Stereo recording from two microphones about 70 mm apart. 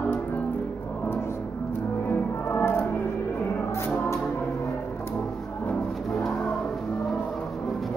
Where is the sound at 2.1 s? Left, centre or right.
Left.